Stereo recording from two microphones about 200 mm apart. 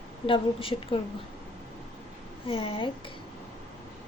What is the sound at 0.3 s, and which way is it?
Speech, 25° left (ahead or behind).